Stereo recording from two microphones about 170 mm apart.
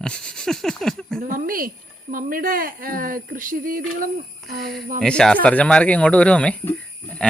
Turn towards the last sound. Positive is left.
turn(degrees=10)  # may be behind; listen again after turning